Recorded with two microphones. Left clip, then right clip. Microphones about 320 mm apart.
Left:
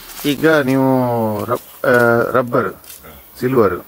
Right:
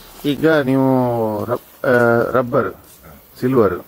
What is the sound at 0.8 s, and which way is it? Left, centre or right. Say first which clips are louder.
Speech: left 1 dB; right.